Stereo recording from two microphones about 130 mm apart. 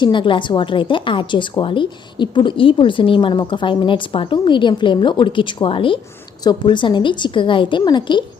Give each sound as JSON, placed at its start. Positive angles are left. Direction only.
{"t": 0.0, "sound": "a woman's voice", "side_deg": 40}